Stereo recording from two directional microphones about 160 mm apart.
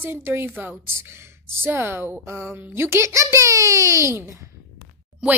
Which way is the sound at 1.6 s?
15° right (ahead or behind).